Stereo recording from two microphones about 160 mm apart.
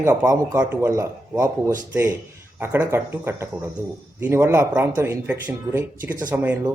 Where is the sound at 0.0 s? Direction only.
15° right (ahead or behind).